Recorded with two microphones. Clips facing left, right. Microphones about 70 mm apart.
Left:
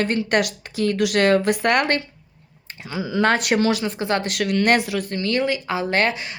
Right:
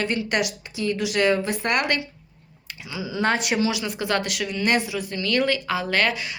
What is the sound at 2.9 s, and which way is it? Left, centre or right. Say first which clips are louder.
Speech: left 4 dB; left.